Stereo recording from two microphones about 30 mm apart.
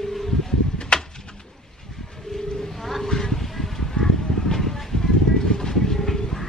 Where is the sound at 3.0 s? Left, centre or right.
Centre.